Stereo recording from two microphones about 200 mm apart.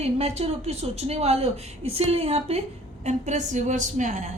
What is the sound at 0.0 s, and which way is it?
A woman's voice, 30° right (ahead or behind).